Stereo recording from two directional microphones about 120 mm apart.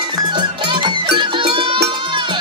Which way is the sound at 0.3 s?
40° right (ahead or behind).